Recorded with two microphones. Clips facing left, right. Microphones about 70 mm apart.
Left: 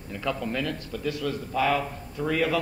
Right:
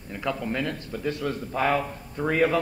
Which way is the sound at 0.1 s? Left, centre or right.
Centre.